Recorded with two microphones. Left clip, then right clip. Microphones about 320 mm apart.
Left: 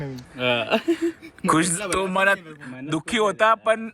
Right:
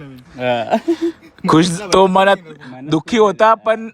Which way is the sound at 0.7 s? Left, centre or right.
Centre.